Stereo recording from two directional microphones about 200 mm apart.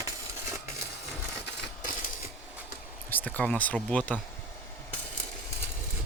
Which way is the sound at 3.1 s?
10° left (ahead or behind).